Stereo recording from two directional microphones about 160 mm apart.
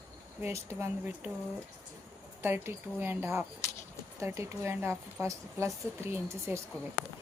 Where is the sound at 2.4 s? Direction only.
15° right (ahead or behind).